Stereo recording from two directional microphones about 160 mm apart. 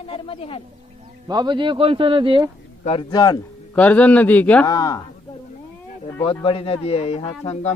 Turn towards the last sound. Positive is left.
turn(degrees=40)  # may be behind; listen again after turning